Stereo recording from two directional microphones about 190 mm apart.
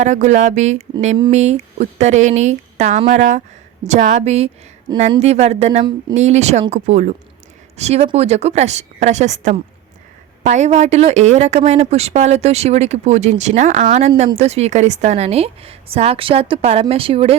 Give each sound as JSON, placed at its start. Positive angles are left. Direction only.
{"t": 0.0, "sound": "speech", "side_deg": -40}
{"t": 4.9, "sound": "a woman's voice", "side_deg": -20}
{"t": 5.2, "sound": "speech", "side_deg": -35}